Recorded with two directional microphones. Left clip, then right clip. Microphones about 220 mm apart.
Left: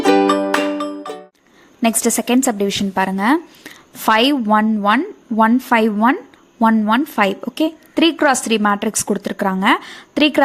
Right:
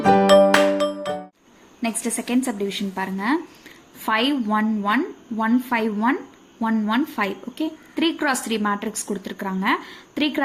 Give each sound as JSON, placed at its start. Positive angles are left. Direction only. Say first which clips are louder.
{"t": 0.0, "sound": "music", "louder": "even", "side_deg": 0}
{"t": 1.8, "sound": "a woman's voice", "louder": "left 9 dB", "side_deg": 40}